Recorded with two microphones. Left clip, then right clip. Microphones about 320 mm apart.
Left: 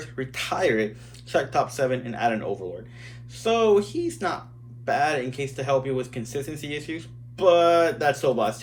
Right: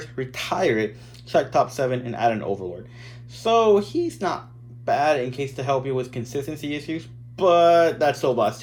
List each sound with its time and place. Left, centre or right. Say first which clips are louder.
0.0 s speech: right 1 dB; centre